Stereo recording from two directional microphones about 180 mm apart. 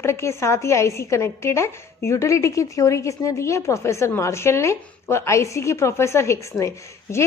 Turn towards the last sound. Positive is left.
turn(degrees=15)  # may be behind; listen again after turning